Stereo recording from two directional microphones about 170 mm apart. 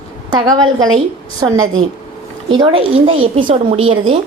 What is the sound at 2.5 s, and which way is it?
A woman's voice, 30° right (ahead or behind).